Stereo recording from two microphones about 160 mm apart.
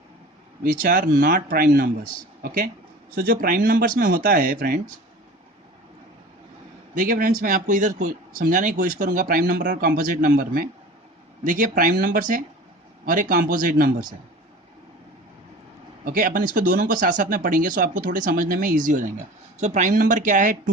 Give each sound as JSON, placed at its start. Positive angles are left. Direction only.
{"t": 0.6, "sound": "speech", "side_deg": -60}
{"t": 3.4, "sound": "speech", "side_deg": -65}
{"t": 6.9, "sound": "speech", "side_deg": -60}
{"t": 16.0, "sound": "speech", "side_deg": -60}